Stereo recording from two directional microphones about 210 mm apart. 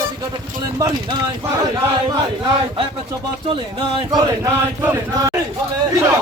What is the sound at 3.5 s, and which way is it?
Speech, 20° right (ahead or behind).